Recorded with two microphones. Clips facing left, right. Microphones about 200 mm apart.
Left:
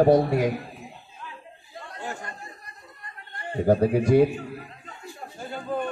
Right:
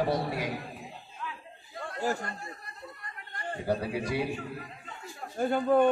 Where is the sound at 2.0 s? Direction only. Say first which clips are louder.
Right 5 dB; 40° right (ahead or behind).